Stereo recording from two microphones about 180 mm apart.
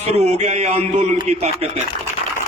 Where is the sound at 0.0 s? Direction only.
35° right (ahead or behind).